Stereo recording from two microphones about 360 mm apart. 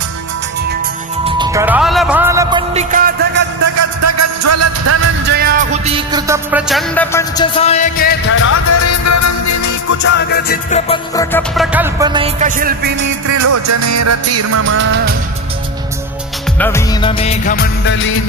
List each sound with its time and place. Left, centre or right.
1.2 s music: centre
3.6 s music: right
6.1 s music: centre; by 8.5 s left
8.5 s music: left
10.0 s music: left; by 13.1 s right
13.2 s music: right
16.6 s music: centre; by 18.1 s left